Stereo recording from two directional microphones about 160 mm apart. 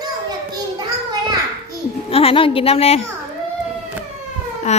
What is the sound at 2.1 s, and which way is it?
Speech, 35° left (ahead or behind).